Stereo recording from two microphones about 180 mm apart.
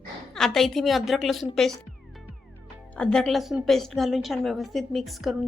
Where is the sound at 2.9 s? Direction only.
5° left (ahead or behind).